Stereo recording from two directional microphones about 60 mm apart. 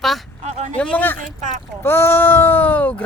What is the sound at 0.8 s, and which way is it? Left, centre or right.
Speech, left.